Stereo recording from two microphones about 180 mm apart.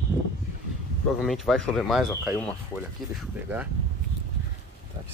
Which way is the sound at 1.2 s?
Centre (ahead or behind).